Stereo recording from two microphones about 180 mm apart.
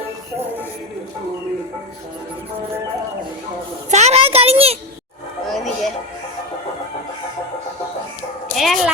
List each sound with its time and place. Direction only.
3.9 s a sound: 35° right (ahead or behind)
5.5 s music: centre (ahead or behind)
8.5 s dog: centre (ahead or behind)